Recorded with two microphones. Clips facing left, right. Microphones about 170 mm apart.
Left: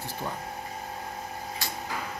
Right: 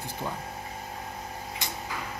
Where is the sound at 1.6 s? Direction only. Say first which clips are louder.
Right 1 dB; 20° right (ahead or behind).